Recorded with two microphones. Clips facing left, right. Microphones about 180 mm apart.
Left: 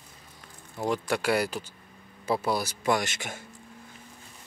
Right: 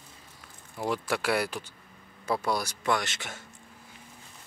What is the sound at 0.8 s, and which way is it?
A man's voice, centre (ahead or behind).